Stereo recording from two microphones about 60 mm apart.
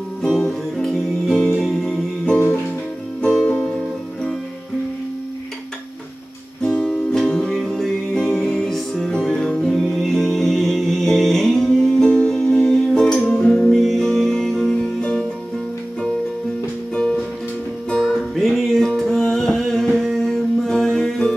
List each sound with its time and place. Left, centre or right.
0.2 s music: centre
6.6 s music: centre
16.9 s music: centre
18.0 s music: centre